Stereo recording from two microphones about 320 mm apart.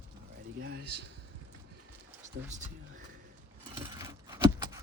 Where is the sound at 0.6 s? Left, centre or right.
Right.